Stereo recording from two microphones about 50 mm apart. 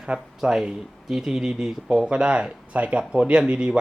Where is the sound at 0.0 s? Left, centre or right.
Centre.